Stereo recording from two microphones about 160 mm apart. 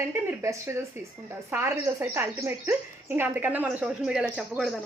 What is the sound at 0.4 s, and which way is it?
A woman's voice, 15° right (ahead or behind).